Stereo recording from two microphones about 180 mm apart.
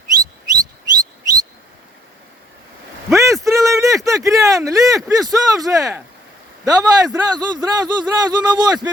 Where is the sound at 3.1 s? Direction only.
15° right (ahead or behind).